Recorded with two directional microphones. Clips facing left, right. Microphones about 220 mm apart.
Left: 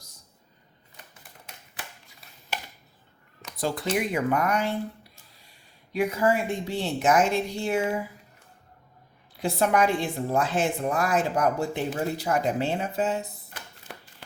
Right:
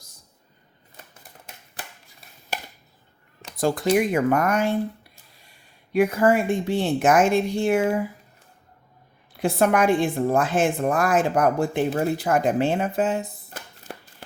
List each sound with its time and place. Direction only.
3.6 s a woman's voice: 50° right (ahead or behind)
5.9 s a woman's voice: 55° right (ahead or behind)
9.4 s a woman's voice: 50° right (ahead or behind)